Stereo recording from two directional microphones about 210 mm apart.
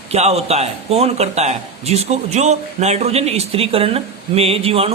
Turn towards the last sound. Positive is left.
turn(degrees=-25)  # may be behind; listen again after turning